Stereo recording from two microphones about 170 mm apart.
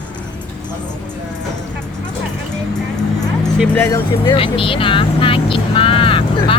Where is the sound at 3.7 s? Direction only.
15° left (ahead or behind).